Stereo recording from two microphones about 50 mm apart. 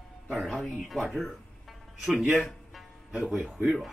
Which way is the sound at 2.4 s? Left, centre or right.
Centre.